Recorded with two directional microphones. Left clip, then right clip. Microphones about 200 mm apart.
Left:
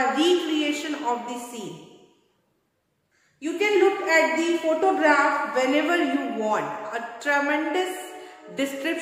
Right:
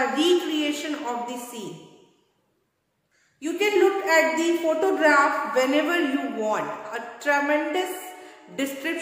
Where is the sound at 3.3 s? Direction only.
15° right (ahead or behind).